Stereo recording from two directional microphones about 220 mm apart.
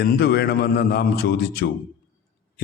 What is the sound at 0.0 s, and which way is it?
A man's voice, 45° left (ahead or behind).